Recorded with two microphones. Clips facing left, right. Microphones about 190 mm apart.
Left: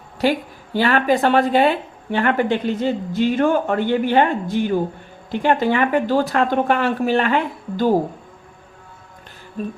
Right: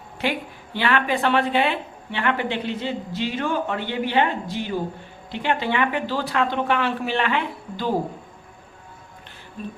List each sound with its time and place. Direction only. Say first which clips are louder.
0.2 s speech: left 7 dB; 40° left (ahead or behind)